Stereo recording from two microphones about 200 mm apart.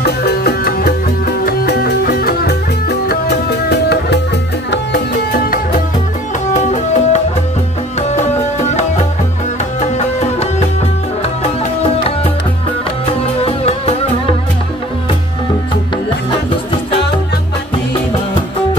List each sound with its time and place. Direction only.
0.0 s music: 55° left (ahead or behind)
6.5 s music: 35° left (ahead or behind)